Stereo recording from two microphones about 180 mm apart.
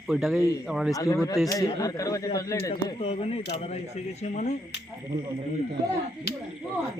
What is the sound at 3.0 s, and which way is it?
Speech, 35° left (ahead or behind).